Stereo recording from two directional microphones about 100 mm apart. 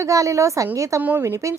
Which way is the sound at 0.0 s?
35° right (ahead or behind).